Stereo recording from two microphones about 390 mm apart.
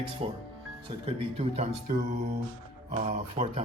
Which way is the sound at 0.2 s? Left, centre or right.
Centre.